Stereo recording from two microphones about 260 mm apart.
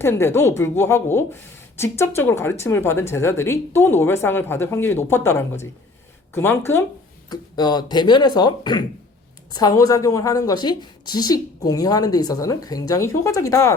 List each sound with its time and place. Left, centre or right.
0.0 s speech: centre